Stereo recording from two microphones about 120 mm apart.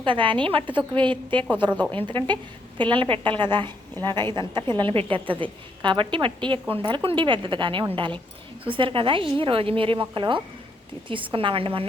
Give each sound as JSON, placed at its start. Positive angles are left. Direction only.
{"t": 0.0, "sound": "a woman's voice", "side_deg": -45}
{"t": 1.7, "sound": "a woman's voice", "side_deg": 15}
{"t": 2.0, "sound": "a woman's voice", "side_deg": -40}